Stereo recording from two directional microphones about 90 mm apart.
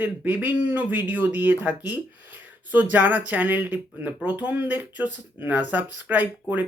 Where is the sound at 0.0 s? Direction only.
20° right (ahead or behind).